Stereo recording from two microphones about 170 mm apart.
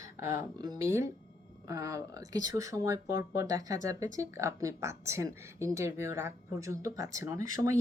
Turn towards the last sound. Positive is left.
turn(degrees=-20)  # may be behind; listen again after turning